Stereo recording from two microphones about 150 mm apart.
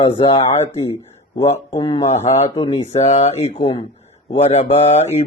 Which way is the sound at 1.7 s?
30° left (ahead or behind).